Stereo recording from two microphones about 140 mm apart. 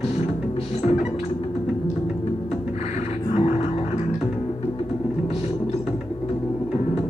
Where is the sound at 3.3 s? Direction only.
50° left (ahead or behind).